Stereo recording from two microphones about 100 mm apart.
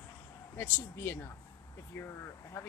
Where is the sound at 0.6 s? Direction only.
25° left (ahead or behind).